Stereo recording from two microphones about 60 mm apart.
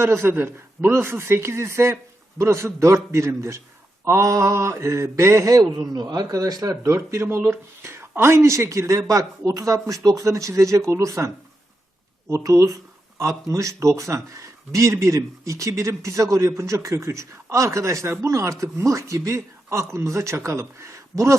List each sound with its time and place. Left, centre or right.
0.0 s speech: right
6.8 s speech: right
12.3 s speech: right
13.1 s speech: right